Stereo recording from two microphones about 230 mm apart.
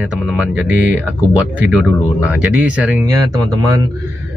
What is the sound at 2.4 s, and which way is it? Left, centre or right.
A man's voice, centre.